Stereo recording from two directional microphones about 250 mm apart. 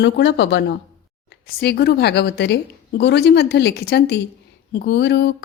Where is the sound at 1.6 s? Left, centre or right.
Left.